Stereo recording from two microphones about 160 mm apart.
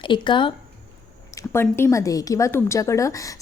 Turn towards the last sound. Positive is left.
turn(degrees=20)  # may be behind; listen again after turning